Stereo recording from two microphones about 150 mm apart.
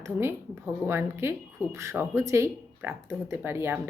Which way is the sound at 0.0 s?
15° right (ahead or behind).